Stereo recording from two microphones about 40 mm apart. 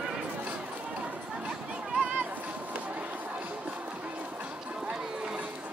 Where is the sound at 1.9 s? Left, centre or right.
Right.